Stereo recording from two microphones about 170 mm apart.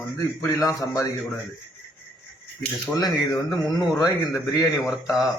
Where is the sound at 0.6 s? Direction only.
20° left (ahead or behind).